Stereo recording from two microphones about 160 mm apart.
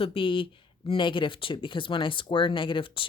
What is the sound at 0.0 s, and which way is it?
Speech, 35° left (ahead or behind).